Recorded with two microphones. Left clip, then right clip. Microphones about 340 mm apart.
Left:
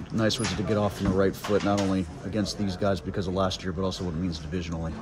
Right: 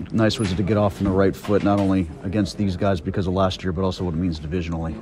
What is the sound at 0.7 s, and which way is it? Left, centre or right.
Speech, right.